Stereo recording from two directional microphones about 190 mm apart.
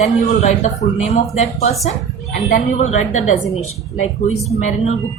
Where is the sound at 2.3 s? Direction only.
55° left (ahead or behind).